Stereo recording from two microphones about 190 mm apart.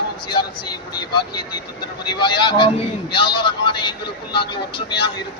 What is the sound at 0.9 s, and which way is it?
Music, 25° left (ahead or behind).